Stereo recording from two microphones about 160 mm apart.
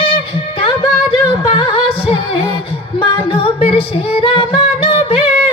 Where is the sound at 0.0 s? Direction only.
35° left (ahead or behind).